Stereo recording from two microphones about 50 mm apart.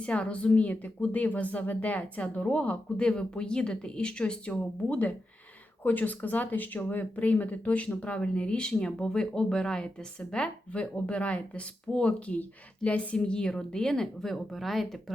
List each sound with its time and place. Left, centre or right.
0.0 s speech: left
13.1 s a woman's voice: centre